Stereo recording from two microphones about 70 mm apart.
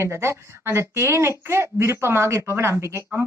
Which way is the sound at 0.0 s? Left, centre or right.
Right.